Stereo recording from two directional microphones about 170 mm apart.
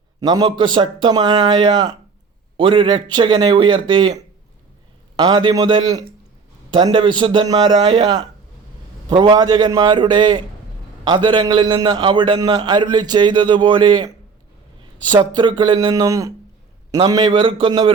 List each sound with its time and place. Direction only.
0.2 s a man's voice: 25° right (ahead or behind)